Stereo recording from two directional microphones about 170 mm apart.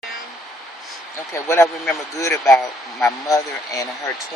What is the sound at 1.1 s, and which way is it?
Speech, 15° left (ahead or behind).